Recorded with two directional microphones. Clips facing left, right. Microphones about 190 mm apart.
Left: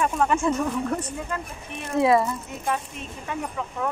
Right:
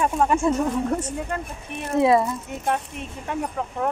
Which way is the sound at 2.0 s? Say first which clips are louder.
Right 1 dB; 25° right (ahead or behind).